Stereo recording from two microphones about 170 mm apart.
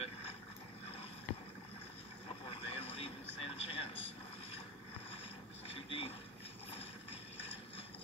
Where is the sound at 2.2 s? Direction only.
35° left (ahead or behind).